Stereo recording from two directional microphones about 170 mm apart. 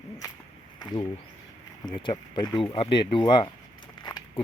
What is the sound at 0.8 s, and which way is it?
Speech, 25° left (ahead or behind).